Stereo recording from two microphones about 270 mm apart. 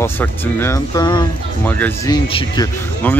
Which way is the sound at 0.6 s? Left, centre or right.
Centre.